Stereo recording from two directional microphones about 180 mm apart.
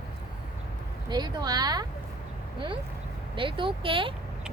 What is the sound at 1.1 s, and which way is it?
Speech, 20° right (ahead or behind).